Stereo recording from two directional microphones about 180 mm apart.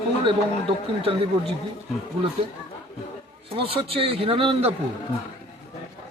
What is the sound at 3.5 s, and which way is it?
A man's voice, 30° right (ahead or behind).